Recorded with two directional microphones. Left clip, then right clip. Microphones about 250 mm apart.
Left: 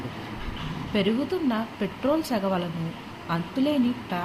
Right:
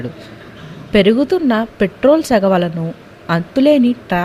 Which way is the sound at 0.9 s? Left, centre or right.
Right.